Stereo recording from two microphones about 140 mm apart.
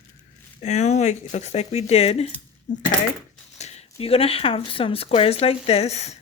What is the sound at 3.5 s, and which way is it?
Speech, 50° left (ahead or behind).